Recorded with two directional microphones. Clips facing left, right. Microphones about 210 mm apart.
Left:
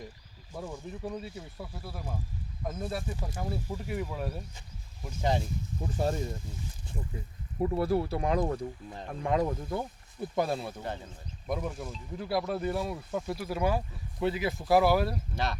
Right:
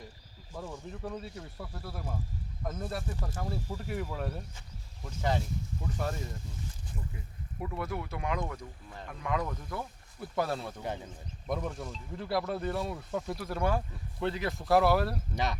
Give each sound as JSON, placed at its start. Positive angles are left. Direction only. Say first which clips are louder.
{"t": 0.5, "sound": "speech", "louder": "left 2 dB", "side_deg": 10}
{"t": 3.1, "sound": "speech", "louder": "left 1 dB", "side_deg": 15}
{"t": 3.8, "sound": "speech", "louder": "left 1 dB", "side_deg": 0}
{"t": 5.0, "sound": "speech", "louder": "left 2 dB", "side_deg": 15}
{"t": 5.8, "sound": "speech", "louder": "left 6 dB", "side_deg": 30}
{"t": 7.6, "sound": "speech", "louder": "left 9 dB", "side_deg": 35}
{"t": 10.8, "sound": "speech", "louder": "right 1 dB", "side_deg": -10}
{"t": 11.4, "sound": "speech", "louder": "left 1 dB", "side_deg": 5}